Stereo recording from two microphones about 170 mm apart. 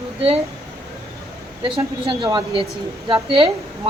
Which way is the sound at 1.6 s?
30° right (ahead or behind).